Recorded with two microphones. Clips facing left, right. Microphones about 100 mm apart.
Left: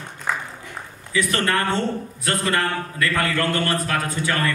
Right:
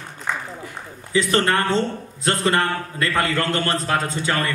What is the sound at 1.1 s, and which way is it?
A man's voice, 25° right (ahead or behind).